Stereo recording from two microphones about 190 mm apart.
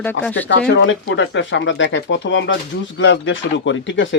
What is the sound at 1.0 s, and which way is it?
Speech, 75° left (ahead or behind).